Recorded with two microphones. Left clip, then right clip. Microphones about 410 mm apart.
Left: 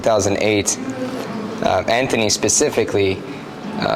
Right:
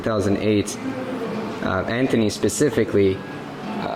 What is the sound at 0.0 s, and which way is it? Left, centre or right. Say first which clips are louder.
Speech: left 6 dB; centre.